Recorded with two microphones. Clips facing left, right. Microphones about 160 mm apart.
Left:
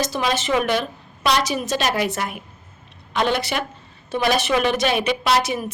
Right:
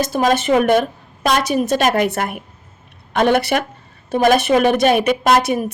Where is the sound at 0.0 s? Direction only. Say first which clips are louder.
Right 6 dB; 50° right (ahead or behind).